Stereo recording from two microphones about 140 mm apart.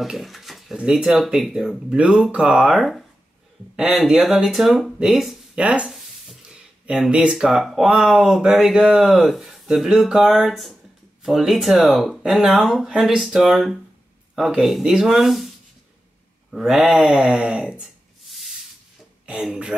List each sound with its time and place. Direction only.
0.0 s speech: centre (ahead or behind)
16.5 s speech: 5° right (ahead or behind)
19.2 s speech: 5° right (ahead or behind)